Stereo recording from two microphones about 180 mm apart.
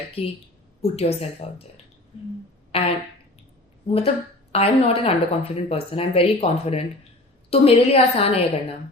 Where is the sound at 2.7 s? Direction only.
30° left (ahead or behind).